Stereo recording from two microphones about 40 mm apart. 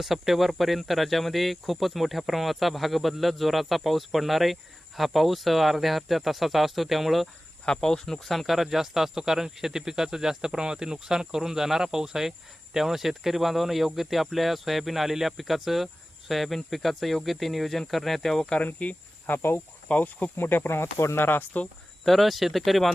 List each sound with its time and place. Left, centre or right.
0.0 s speech: centre
7.6 s speech: centre
18.6 s speech: left
19.3 s speech: left
19.9 s speech: left
20.3 s speech: left
22.0 s speech: centre